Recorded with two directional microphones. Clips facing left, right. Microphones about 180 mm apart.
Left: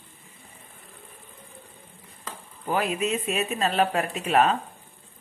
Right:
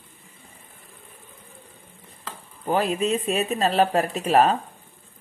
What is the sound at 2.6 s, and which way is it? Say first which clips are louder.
Speech: right 3 dB; 30° right (ahead or behind).